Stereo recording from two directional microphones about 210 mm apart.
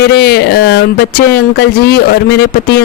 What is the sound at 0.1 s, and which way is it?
Speech, 50° left (ahead or behind).